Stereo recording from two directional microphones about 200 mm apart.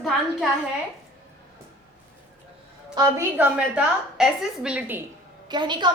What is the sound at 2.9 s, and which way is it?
A woman's voice, 15° right (ahead or behind).